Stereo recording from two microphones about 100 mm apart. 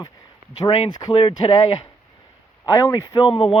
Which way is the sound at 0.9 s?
45° left (ahead or behind).